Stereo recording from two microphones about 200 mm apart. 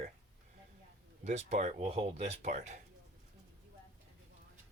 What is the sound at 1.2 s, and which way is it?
Speech, 35° right (ahead or behind).